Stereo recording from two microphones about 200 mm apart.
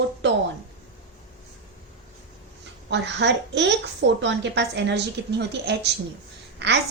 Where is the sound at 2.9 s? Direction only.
60° right (ahead or behind).